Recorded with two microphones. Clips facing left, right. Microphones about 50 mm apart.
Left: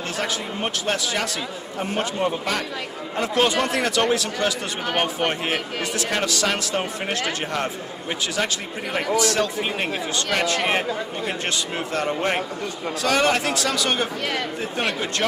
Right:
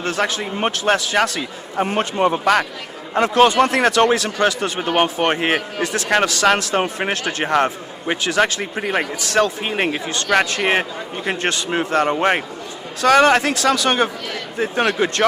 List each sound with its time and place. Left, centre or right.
0.0 s speech: right
12.0 s a man's voice: right
13.0 s speech: right